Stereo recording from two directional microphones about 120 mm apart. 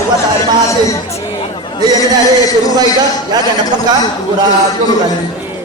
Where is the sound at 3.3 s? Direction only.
35° right (ahead or behind).